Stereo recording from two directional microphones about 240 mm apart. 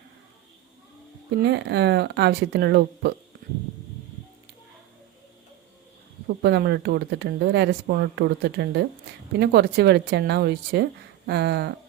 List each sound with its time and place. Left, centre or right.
1.4 s speech: right
6.2 s speech: right